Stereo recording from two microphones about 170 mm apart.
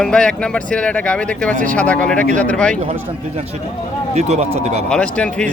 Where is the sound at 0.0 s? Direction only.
5° left (ahead or behind).